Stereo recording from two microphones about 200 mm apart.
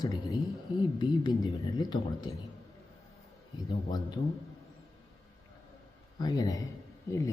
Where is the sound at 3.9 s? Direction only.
20° left (ahead or behind).